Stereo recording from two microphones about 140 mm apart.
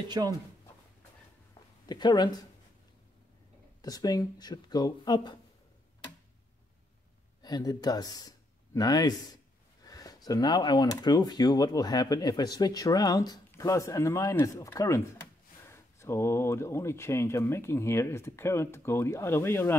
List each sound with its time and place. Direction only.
0.2 s speech: 30° right (ahead or behind)
1.9 s speech: 30° left (ahead or behind)
3.8 s speech: 25° left (ahead or behind)
7.4 s speech: 30° left (ahead or behind)